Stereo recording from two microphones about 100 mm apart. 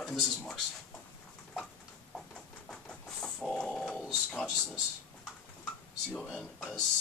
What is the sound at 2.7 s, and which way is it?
Bird, 5° left (ahead or behind).